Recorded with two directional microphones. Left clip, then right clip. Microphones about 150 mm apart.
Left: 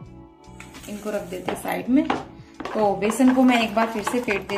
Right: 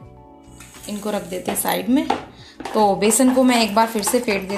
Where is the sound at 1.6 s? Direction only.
45° right (ahead or behind).